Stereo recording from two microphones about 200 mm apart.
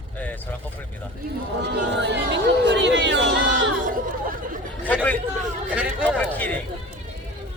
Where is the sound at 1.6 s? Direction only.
60° right (ahead or behind).